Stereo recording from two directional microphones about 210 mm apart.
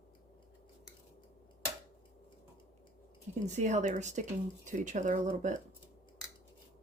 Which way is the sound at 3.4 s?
35° right (ahead or behind).